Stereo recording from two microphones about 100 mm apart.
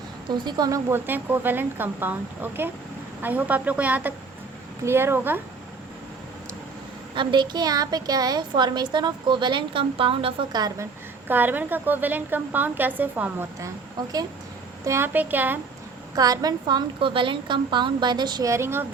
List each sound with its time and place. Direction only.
0.3 s a woman's voice: 50° right (ahead or behind)
0.7 s a woman's voice: 25° right (ahead or behind)
7.2 s a woman's voice: 50° right (ahead or behind)
11.3 s a woman's voice: 20° right (ahead or behind)
14.8 s a woman's voice: 25° right (ahead or behind)
16.1 s a woman's voice: 40° right (ahead or behind)
18.4 s a woman's voice: 25° right (ahead or behind)